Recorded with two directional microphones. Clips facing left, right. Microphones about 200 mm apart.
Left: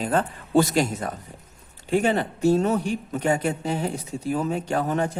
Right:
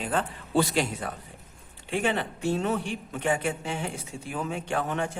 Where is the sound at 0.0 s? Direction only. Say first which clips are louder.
Left 5 dB; 40° left (ahead or behind).